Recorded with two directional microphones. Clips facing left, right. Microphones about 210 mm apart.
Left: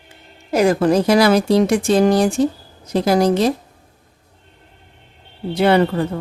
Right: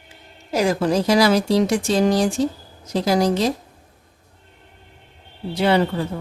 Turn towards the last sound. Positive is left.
turn(degrees=55)  # may be behind; listen again after turning